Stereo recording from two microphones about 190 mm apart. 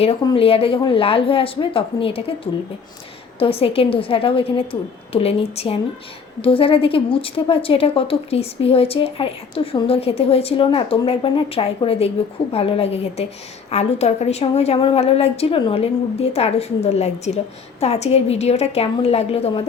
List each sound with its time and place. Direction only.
0.0 s a woman's voice: 30° left (ahead or behind)